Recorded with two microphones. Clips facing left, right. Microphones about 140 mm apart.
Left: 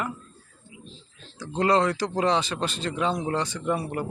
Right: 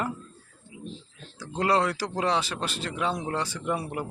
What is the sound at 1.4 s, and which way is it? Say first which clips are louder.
Speech: left 3 dB; 5° right (ahead or behind).